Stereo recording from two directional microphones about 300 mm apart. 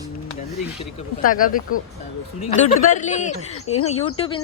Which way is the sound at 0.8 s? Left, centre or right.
Left.